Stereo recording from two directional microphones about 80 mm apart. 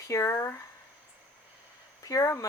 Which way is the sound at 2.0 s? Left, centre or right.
Left.